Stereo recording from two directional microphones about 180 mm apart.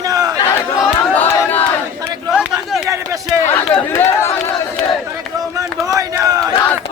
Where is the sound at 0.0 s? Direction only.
20° right (ahead or behind).